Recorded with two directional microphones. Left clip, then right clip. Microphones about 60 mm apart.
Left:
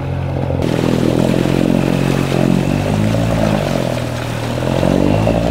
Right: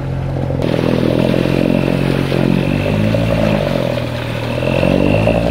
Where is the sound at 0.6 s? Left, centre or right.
Centre.